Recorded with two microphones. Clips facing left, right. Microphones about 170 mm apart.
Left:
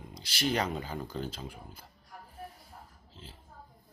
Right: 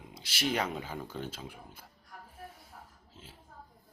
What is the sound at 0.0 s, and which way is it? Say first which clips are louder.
Speech: left 1 dB; 5° right (ahead or behind).